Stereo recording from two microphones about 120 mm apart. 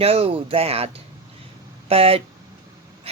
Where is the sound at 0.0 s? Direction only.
55° right (ahead or behind).